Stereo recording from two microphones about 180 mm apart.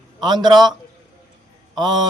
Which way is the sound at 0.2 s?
25° right (ahead or behind).